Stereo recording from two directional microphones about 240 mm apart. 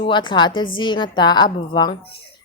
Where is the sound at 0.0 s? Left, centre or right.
Centre.